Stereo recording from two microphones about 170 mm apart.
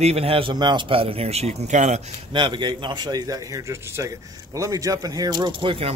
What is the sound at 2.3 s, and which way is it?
A man's voice, 25° right (ahead or behind).